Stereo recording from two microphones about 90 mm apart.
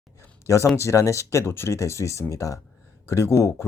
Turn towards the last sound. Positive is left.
turn(degrees=30)  # may be behind; listen again after turning